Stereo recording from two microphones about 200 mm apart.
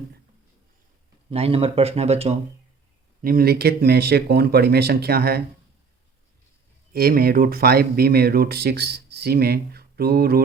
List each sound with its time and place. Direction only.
1.3 s speech: 30° right (ahead or behind)
3.2 s speech: 45° right (ahead or behind)
6.9 s speech: 50° right (ahead or behind)